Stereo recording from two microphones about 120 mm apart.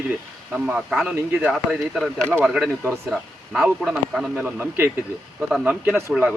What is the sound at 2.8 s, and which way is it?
A man's voice, 20° right (ahead or behind).